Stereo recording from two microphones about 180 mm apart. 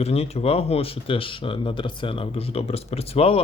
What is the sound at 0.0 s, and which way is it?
Speech, 35° left (ahead or behind).